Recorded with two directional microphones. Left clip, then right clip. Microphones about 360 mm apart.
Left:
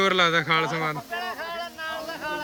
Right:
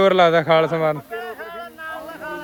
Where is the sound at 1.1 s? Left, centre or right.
Left.